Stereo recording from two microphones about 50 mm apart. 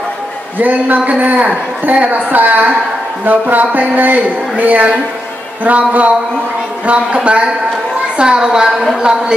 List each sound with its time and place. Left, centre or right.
0.6 s speech: right
7.2 s a woman's voice: right